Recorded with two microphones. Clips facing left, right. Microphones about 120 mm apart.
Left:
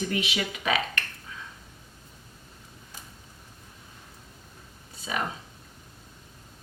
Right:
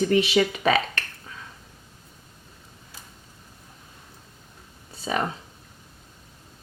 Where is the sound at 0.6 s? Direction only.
35° right (ahead or behind).